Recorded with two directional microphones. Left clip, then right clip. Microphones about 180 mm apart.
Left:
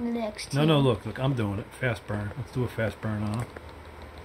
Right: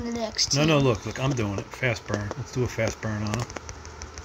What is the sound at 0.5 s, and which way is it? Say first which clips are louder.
Speech: right 1 dB; 10° left (ahead or behind).